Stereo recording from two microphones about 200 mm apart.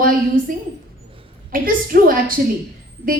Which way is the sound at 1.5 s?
45° right (ahead or behind).